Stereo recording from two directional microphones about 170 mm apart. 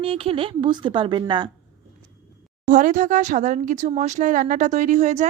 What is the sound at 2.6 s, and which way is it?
Speech, 50° right (ahead or behind).